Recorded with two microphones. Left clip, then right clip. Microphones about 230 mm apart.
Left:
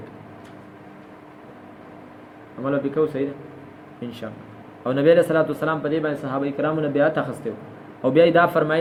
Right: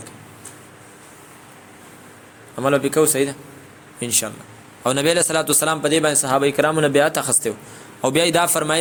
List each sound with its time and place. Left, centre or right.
2.6 s a man's voice: right
4.8 s a man's voice: right